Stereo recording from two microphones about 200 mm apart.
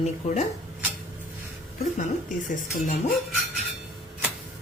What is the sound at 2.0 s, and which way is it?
Speech, 40° left (ahead or behind).